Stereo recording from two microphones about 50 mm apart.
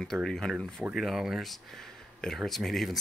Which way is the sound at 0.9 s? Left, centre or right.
Centre.